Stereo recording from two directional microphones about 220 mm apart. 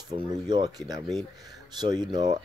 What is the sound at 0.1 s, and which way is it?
Speech, 20° right (ahead or behind).